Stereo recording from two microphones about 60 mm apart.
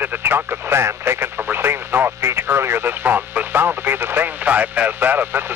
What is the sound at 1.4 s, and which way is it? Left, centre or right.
Radio, right.